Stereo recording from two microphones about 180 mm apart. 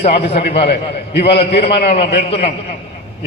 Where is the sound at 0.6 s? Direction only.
65° left (ahead or behind).